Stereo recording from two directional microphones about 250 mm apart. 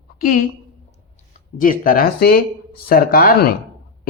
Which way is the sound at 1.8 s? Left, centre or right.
Left.